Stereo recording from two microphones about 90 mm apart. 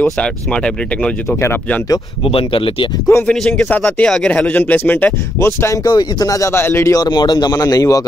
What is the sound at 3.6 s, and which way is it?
Speech, 20° left (ahead or behind).